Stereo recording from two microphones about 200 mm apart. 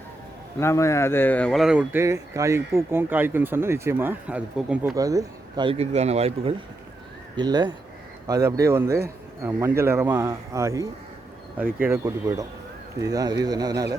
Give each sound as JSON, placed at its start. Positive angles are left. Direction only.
{"t": 0.6, "sound": "speech", "side_deg": 15}
{"t": 4.9, "sound": "speech", "side_deg": -15}